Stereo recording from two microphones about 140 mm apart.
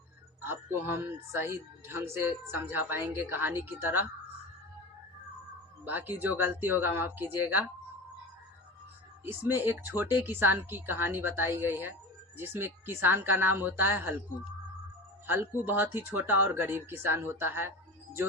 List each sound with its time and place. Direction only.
0.4 s speech: 15° right (ahead or behind)
5.8 s speech: 15° right (ahead or behind)
9.2 s speech: 15° right (ahead or behind)
15.3 s speech: 15° right (ahead or behind)